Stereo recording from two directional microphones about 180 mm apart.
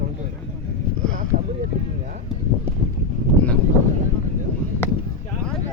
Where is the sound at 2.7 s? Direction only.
10° right (ahead or behind).